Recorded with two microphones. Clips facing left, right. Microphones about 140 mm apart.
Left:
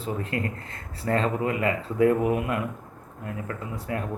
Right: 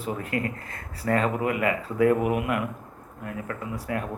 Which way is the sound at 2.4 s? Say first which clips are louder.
Right 1 dB; 30° left (ahead or behind).